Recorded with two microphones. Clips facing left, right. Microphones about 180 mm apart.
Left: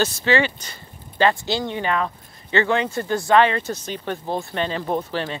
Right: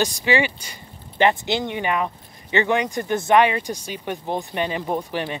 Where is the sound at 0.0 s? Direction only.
15° right (ahead or behind).